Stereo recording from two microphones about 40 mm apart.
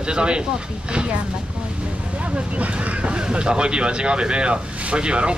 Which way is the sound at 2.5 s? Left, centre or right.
Right.